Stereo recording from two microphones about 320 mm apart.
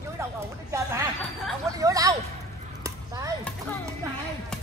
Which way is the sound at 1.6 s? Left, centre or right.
Centre.